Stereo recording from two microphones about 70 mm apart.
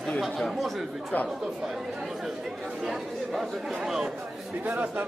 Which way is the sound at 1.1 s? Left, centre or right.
Left.